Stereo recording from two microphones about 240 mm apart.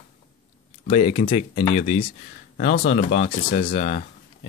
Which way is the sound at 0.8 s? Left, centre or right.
Left.